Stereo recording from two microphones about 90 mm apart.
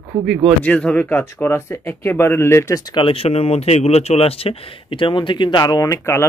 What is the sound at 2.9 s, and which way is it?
Speech, 80° left.